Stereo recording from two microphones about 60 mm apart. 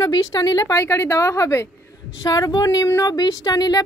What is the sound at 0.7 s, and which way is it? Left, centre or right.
Speech, left.